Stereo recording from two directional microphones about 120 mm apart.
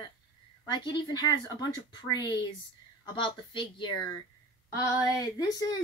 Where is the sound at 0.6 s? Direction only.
40° left (ahead or behind).